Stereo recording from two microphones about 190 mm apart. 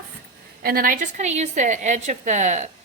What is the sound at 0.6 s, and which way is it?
A woman's voice, 50° right (ahead or behind).